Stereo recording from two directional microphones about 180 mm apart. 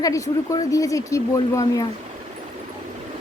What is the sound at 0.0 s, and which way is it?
Speech, 20° left (ahead or behind).